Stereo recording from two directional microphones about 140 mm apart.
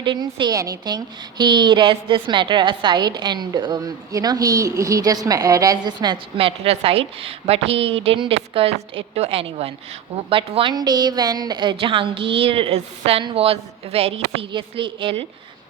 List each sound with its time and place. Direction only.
0.0 s a woman's voice: 35° right (ahead or behind)
6.4 s a woman's voice: 45° right (ahead or behind)